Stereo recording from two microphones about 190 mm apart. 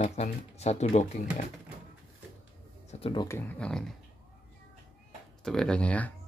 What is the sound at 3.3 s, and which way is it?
Speech, 10° left (ahead or behind).